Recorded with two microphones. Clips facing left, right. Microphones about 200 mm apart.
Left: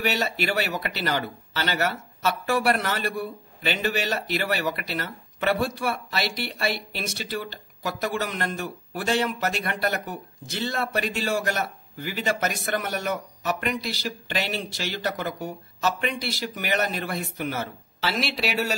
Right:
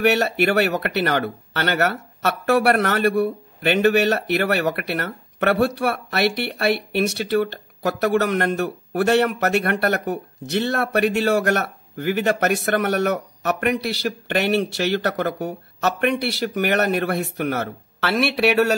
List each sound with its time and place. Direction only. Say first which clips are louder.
0.0 s speech: right 8 dB; 65° right (ahead or behind)